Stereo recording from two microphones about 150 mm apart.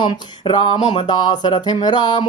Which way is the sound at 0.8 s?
50° left (ahead or behind).